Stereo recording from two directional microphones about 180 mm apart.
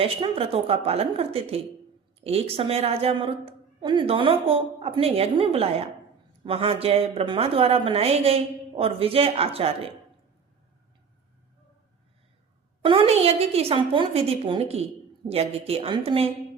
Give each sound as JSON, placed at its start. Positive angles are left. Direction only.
{"t": 0.0, "sound": "speech", "side_deg": -30}
{"t": 12.8, "sound": "speech", "side_deg": -30}